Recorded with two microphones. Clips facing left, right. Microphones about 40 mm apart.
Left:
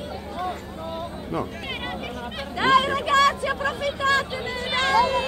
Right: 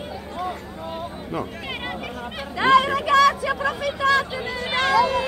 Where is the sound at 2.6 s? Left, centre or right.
Right.